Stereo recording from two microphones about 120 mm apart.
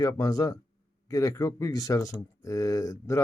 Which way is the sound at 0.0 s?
30° left (ahead or behind).